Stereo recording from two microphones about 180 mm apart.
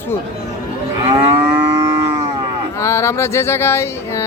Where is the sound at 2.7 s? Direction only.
15° left (ahead or behind).